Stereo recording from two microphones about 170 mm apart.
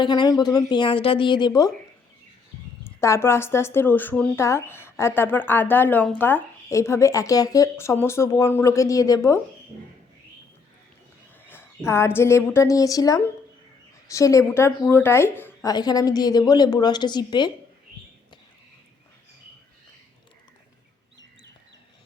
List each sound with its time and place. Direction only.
0.0 s a woman's voice: 25° left (ahead or behind)
2.8 s speech: 15° left (ahead or behind)
11.4 s a woman's voice: 15° left (ahead or behind)
15.7 s a woman's voice: 25° left (ahead or behind)